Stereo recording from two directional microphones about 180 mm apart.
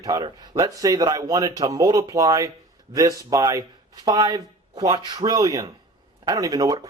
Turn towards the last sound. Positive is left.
turn(degrees=-20)  # may be behind; listen again after turning